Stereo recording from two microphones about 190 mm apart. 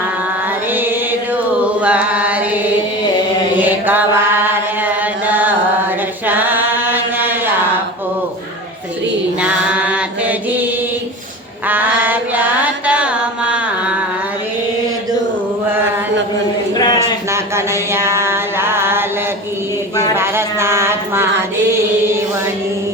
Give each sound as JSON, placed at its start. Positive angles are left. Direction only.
{"t": 1.8, "sound": "chant", "side_deg": -5}
{"t": 3.6, "sound": "mantra", "side_deg": -10}
{"t": 5.2, "sound": "chant", "side_deg": -10}
{"t": 9.4, "sound": "mantra", "side_deg": -5}
{"t": 11.7, "sound": "chant", "side_deg": -10}
{"t": 17.0, "sound": "a sound", "side_deg": -15}
{"t": 20.1, "sound": "a sound", "side_deg": -15}